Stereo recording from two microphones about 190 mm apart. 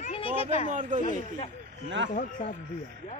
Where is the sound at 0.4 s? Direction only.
30° left (ahead or behind).